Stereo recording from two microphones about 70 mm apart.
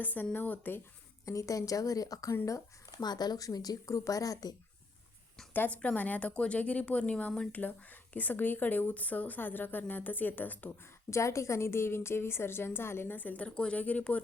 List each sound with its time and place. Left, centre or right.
0.0 s a woman's voice: left
1.2 s speech: left
3.0 s speech: left
5.5 s a woman's voice: left
11.1 s a woman's voice: left